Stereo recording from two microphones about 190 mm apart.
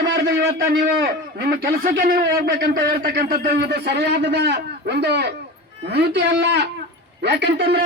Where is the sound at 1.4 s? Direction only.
50° right (ahead or behind).